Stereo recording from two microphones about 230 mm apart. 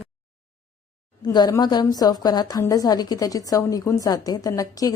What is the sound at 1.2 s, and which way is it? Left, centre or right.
A woman's voice, centre.